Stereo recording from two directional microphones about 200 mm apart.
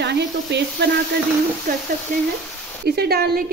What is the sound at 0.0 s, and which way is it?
Frying, 60° right (ahead or behind).